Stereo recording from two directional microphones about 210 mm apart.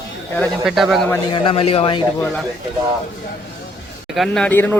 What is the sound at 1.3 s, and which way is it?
Speech, 25° left (ahead or behind).